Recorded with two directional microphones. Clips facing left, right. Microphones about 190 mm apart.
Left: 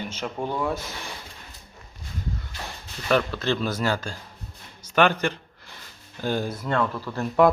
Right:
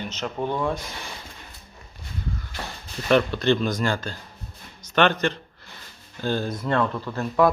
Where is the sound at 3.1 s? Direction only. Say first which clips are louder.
Right 4 dB; centre (ahead or behind).